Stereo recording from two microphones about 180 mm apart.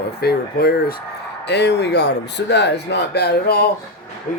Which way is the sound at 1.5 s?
70° left (ahead or behind).